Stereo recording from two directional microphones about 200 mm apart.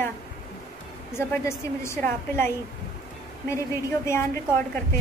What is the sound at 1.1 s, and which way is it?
A woman's voice, 15° left (ahead or behind).